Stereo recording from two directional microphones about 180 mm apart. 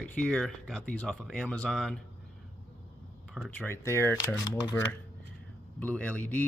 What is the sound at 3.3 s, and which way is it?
Speech, centre (ahead or behind).